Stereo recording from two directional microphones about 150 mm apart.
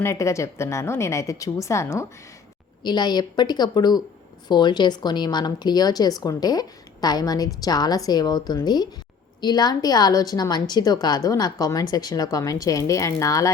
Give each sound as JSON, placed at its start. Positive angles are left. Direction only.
{"t": 0.0, "sound": "speech", "side_deg": 20}